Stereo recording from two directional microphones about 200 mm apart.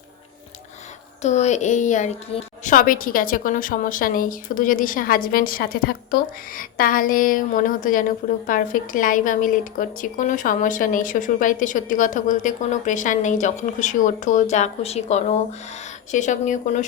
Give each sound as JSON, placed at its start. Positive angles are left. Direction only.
{"t": 1.2, "sound": "a woman's voice", "side_deg": 35}